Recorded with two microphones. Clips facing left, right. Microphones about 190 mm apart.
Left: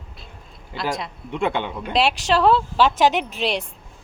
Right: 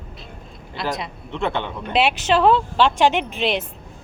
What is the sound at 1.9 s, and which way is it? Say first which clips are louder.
A woman's voice: right 1 dB; centre (ahead or behind).